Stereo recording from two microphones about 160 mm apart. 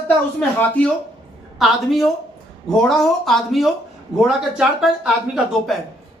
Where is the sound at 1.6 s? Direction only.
Centre (ahead or behind).